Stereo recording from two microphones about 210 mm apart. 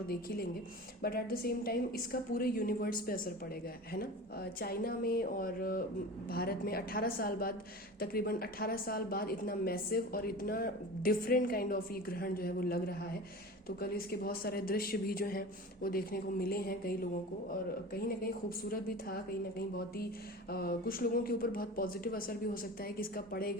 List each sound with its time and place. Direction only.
0.1 s speech: 45° left (ahead or behind)